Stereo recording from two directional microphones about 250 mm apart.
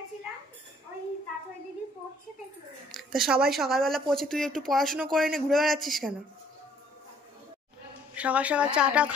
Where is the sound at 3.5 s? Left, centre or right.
Centre.